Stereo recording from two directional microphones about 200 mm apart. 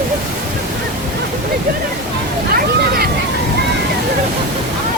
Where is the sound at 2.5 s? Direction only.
50° right (ahead or behind).